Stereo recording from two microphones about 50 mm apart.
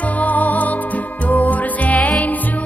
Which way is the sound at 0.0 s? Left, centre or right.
Left.